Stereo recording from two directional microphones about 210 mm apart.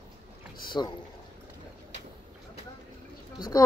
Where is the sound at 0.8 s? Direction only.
5° left (ahead or behind).